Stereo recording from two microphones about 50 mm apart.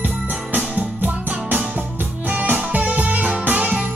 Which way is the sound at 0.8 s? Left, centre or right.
Right.